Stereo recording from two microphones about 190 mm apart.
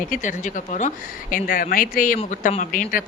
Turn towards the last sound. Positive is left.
turn(degrees=45)  # may be behind; listen again after turning